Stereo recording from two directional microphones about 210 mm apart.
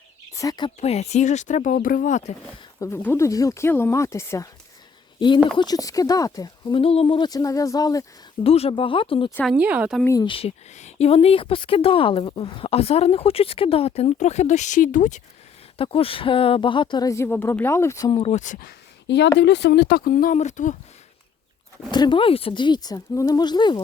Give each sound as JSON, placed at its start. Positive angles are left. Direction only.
{"t": 0.3, "sound": "speech", "side_deg": 20}
{"t": 0.8, "sound": "speech", "side_deg": 30}
{"t": 2.8, "sound": "speech", "side_deg": 10}
{"t": 5.5, "sound": "speech", "side_deg": 20}
{"t": 8.4, "sound": "a woman's voice", "side_deg": 30}
{"t": 9.3, "sound": "speech", "side_deg": 5}
{"t": 9.6, "sound": "speech", "side_deg": -5}
{"t": 10.0, "sound": "a woman's voice", "side_deg": 15}
{"t": 15.8, "sound": "a woman's voice", "side_deg": 25}
{"t": 19.0, "sound": "speech", "side_deg": 55}
{"t": 21.9, "sound": "a woman's voice", "side_deg": 20}